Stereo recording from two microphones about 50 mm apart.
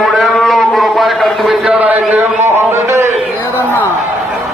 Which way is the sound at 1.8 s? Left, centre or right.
Right.